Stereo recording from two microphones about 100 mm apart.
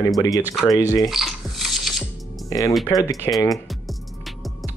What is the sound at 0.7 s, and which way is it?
Speech, 35° left (ahead or behind).